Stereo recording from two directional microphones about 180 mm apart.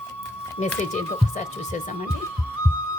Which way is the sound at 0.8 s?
45° left (ahead or behind).